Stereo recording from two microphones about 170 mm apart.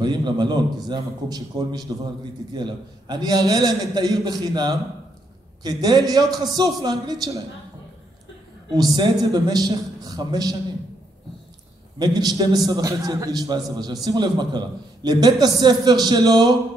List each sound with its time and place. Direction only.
0.0 s a sound: 25° right (ahead or behind)
0.8 s a man's voice: 25° right (ahead or behind)
8.7 s a man's voice: 25° right (ahead or behind)
12.0 s a man's voice: 25° right (ahead or behind)